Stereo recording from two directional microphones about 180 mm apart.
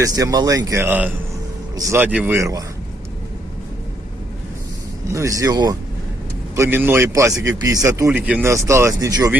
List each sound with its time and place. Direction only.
0.0 s speech: 20° right (ahead or behind)
5.1 s speech: 20° right (ahead or behind)
6.6 s speech: 10° right (ahead or behind)